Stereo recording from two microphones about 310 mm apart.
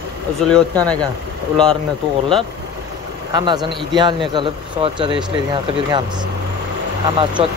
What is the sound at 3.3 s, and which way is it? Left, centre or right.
Speech, centre.